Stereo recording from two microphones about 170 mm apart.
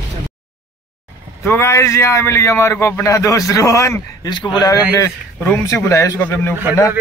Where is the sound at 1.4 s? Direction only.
15° left (ahead or behind).